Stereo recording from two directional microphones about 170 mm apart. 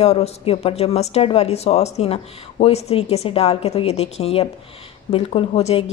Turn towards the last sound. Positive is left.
turn(degrees=35)  # may be behind; listen again after turning